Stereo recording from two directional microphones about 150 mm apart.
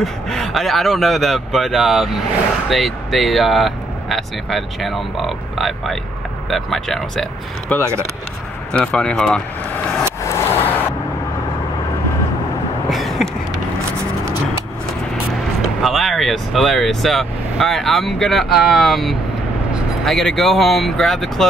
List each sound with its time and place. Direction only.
0.0 s speech: centre (ahead or behind)
10.3 s vehicle: 15° left (ahead or behind)
12.9 s a sound: centre (ahead or behind)
15.8 s speech: centre (ahead or behind)